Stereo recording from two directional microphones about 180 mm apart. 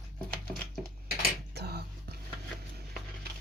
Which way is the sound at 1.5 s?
65° right (ahead or behind).